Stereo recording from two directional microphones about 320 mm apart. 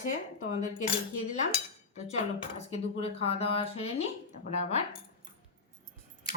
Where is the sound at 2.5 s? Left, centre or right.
Centre.